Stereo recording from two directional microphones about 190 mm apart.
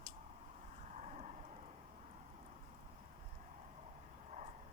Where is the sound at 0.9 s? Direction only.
40° right (ahead or behind).